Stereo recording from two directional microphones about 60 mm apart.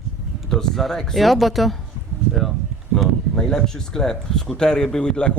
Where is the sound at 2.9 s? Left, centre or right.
Centre.